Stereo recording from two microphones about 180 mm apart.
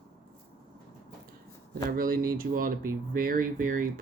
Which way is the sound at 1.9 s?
55° right (ahead or behind).